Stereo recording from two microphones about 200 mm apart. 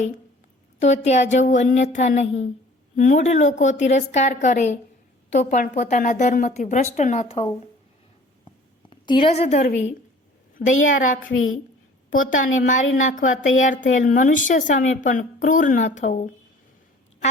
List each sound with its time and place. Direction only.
0.8 s a woman's voice: 35° left (ahead or behind)
8.9 s a woman's voice: 25° left (ahead or behind); by 11.2 s 40° left (ahead or behind)
11.3 s a woman's voice: 85° left
12.1 s a woman's voice: 40° left (ahead or behind)